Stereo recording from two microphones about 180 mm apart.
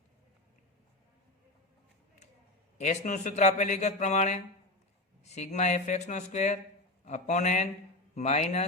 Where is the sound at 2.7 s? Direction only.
40° left (ahead or behind).